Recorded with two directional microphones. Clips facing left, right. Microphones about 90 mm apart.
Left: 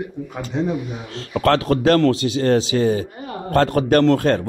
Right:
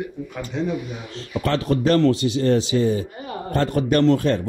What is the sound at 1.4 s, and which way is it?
Speech, 90° left.